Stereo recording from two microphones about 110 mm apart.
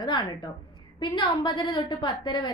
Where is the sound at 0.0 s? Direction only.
40° left (ahead or behind).